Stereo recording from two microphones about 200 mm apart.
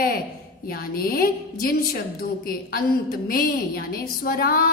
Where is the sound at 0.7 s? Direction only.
50° left (ahead or behind).